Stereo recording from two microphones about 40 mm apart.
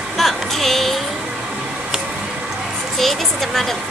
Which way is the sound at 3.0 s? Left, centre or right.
Centre.